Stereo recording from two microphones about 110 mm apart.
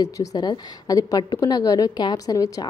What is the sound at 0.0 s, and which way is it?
A woman's voice, 35° left (ahead or behind).